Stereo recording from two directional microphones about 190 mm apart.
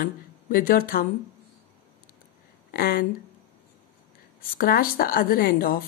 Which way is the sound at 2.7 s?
50° left (ahead or behind).